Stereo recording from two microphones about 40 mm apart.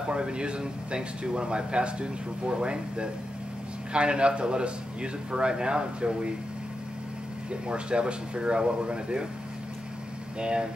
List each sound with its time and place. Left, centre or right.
0.1 s speech: right
7.6 s speech: right
10.4 s speech: right